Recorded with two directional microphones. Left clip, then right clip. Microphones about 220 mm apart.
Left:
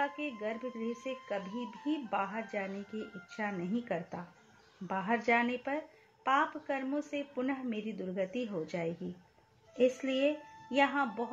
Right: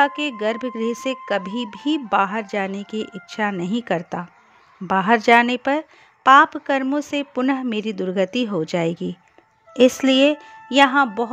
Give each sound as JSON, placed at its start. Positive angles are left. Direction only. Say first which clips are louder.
{"t": 0.0, "sound": "a woman's voice", "louder": "right 16 dB", "side_deg": -50}